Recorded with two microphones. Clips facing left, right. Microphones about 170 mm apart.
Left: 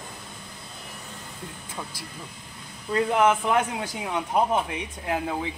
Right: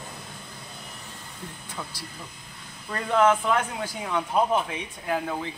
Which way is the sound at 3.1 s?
20° left (ahead or behind).